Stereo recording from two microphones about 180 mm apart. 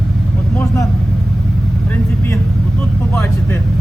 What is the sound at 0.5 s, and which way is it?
Vehicle, 15° left (ahead or behind).